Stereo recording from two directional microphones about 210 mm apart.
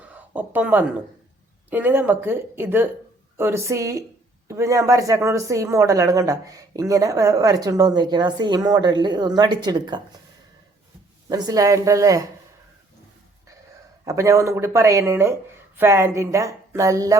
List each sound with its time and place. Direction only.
0.0 s a sound: 5° right (ahead or behind)
1.7 s speech: 10° right (ahead or behind)
11.3 s speech: 20° right (ahead or behind)
14.0 s speech: 15° right (ahead or behind)